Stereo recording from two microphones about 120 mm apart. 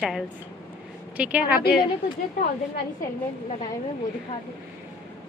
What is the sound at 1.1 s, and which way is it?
Speech, 10° right (ahead or behind).